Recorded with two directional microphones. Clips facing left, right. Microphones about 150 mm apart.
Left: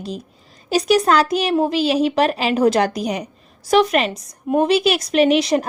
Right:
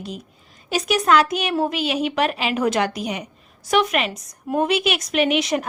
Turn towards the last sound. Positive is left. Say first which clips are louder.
# left 5 dB
turn(degrees=35)  # may be behind; listen again after turning